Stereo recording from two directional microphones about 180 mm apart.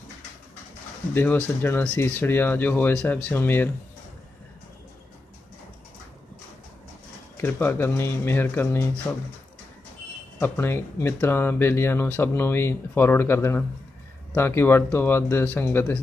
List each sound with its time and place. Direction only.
1.1 s speech: 10° left (ahead or behind)
7.3 s speech: 10° left (ahead or behind)
10.4 s speech: 10° left (ahead or behind)